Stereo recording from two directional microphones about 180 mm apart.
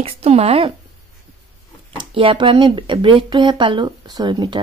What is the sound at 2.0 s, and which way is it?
Speech, 25° right (ahead or behind).